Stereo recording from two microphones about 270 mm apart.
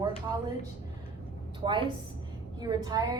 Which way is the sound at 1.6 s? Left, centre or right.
Centre.